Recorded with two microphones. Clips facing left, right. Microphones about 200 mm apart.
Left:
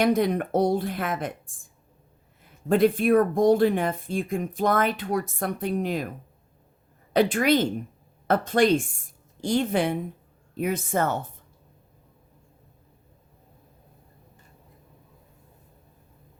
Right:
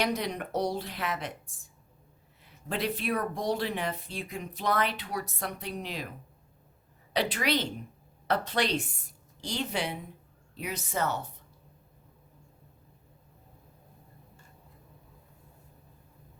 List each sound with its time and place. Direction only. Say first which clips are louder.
0.0 s a woman's voice: left 9 dB; 50° left (ahead or behind)